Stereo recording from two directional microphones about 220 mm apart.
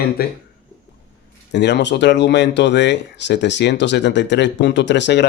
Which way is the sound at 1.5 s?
50° left (ahead or behind).